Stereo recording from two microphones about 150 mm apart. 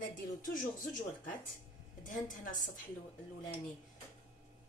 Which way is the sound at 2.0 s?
60° left (ahead or behind).